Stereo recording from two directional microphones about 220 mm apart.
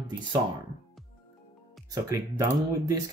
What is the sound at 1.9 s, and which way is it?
Speech, 15° right (ahead or behind).